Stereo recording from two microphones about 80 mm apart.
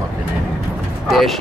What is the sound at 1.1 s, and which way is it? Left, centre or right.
Speech, centre.